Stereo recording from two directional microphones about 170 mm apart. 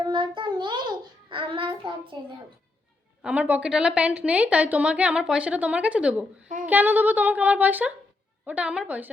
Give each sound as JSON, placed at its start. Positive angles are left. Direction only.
{"t": 0.0, "sound": "child singing", "side_deg": -30}
{"t": 3.2, "sound": "a woman's voice", "side_deg": -5}